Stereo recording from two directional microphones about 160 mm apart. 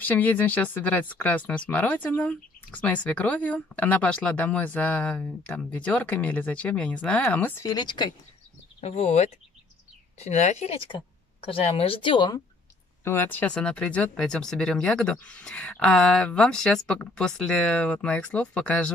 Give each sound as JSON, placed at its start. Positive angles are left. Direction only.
{"t": 0.0, "sound": "speech", "side_deg": 10}
{"t": 7.6, "sound": "speech", "side_deg": 25}
{"t": 8.8, "sound": "speech", "side_deg": 40}
{"t": 13.0, "sound": "speech", "side_deg": 15}